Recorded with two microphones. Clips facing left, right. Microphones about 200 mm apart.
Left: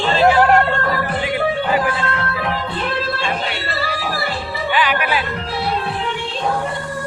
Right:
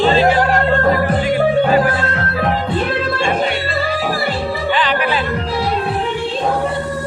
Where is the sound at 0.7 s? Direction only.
40° right (ahead or behind).